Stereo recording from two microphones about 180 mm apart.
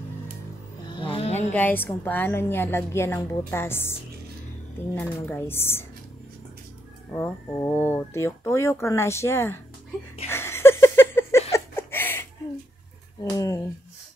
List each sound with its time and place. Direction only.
0.9 s music: 30° left (ahead or behind)
1.5 s speech: 10° left (ahead or behind)
4.9 s speech: 10° left (ahead or behind)
7.2 s speech: 10° left (ahead or behind)
10.2 s a sound: 15° left (ahead or behind)
13.2 s speech: 15° left (ahead or behind)